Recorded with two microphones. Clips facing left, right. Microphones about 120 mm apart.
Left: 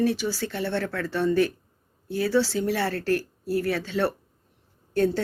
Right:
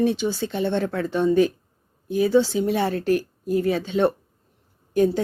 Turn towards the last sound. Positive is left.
turn(degrees=-15)  # may be behind; listen again after turning